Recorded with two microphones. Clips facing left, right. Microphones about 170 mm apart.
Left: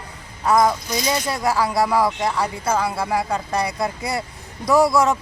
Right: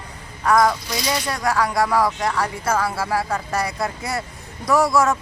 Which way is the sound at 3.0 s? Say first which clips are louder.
Left 1 dB; 15° left (ahead or behind).